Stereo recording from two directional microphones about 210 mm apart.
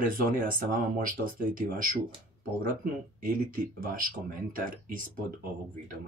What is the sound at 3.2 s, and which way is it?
Speech, 40° right (ahead or behind).